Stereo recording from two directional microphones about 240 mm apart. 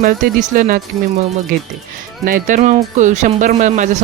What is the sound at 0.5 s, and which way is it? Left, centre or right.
Speech, right.